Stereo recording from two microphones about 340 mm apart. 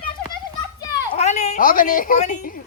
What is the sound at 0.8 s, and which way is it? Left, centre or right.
A woman's voice, centre.